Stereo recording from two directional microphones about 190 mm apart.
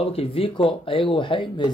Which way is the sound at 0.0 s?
30° left (ahead or behind).